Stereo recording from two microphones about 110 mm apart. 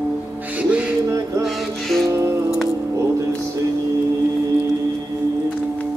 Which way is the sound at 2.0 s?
25° right (ahead or behind).